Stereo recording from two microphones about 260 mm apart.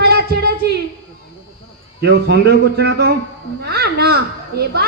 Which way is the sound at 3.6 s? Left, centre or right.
Right.